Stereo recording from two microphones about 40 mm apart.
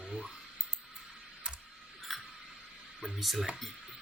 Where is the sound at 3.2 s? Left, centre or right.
Centre.